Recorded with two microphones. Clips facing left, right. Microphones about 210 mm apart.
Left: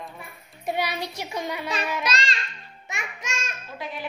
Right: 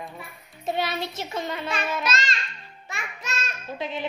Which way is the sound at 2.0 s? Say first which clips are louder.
Even; 30° left (ahead or behind).